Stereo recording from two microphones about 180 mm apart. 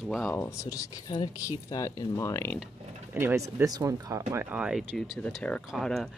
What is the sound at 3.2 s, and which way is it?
Speech, 15° right (ahead or behind).